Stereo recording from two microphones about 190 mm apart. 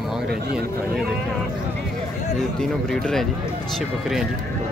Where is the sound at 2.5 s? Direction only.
5° left (ahead or behind).